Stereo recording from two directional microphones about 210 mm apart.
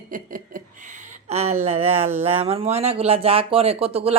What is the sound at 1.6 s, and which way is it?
Speech, 30° right (ahead or behind).